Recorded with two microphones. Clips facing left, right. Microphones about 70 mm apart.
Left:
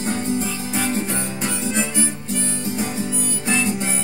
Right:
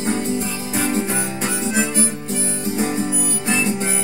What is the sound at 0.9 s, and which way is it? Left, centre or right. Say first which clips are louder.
Music: right 2 dB; right.